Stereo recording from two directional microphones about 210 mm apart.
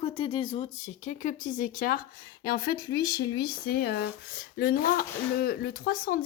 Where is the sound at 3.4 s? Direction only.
50° left (ahead or behind).